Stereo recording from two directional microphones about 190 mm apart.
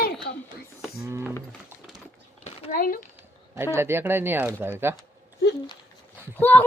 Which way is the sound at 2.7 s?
45° left (ahead or behind).